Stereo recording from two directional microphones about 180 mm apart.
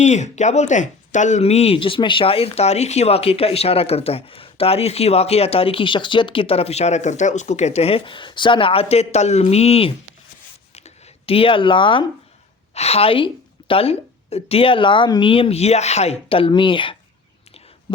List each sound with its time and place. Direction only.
0.0 s speech: 40° left (ahead or behind)
10.8 s a sound: 35° left (ahead or behind)
12.7 s speech: 35° left (ahead or behind)